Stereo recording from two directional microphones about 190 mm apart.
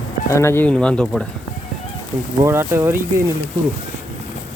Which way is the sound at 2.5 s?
15° right (ahead or behind).